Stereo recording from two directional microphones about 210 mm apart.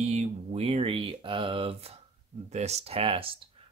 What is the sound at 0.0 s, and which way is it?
Speech, 30° right (ahead or behind).